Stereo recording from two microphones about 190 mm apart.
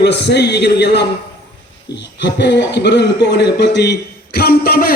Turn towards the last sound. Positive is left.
turn(degrees=50)  # may be behind; listen again after turning